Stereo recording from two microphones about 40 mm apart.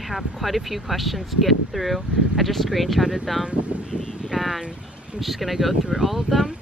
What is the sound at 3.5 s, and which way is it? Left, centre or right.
Speech, right.